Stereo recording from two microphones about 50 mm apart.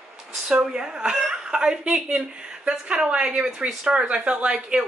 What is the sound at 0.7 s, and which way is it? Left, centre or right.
A woman's voice, centre.